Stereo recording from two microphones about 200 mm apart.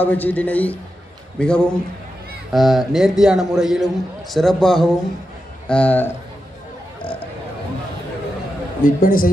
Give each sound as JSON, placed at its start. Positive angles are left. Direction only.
{"t": 0.0, "sound": "a man's voice", "side_deg": 10}
{"t": 7.0, "sound": "a sound", "side_deg": 25}
{"t": 8.8, "sound": "a man's voice", "side_deg": 45}